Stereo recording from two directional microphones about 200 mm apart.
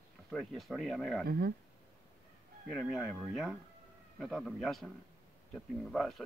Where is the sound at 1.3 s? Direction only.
50° right (ahead or behind).